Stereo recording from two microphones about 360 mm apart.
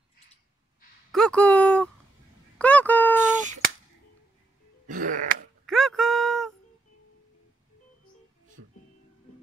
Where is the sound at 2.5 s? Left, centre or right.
Centre.